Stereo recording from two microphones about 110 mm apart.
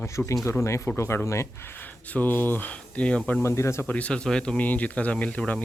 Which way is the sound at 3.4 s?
25° left (ahead or behind).